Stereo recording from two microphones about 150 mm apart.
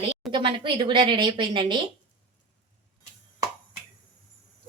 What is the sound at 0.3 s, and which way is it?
Speech, 35° right (ahead or behind).